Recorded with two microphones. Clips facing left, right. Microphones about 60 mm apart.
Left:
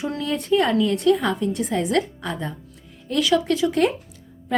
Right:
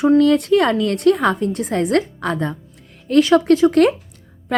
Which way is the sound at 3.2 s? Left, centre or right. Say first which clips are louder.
Right 7 dB; right.